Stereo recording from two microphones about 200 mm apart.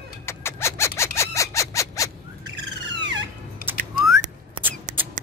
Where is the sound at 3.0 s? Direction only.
60° right (ahead or behind).